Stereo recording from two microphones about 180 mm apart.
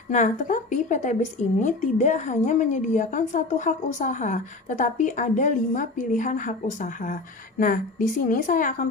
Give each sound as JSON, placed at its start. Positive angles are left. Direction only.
{"t": 0.1, "sound": "a woman's voice", "side_deg": 45}